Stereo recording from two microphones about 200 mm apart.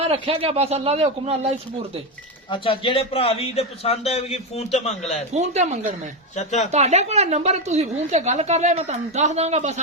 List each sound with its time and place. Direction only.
0.0 s a woman's voice: 30° right (ahead or behind)
2.5 s a man's voice: 25° left (ahead or behind)
5.3 s a woman's voice: 35° right (ahead or behind)
6.3 s a man's voice: 35° left (ahead or behind)
6.7 s a woman's voice: 35° right (ahead or behind)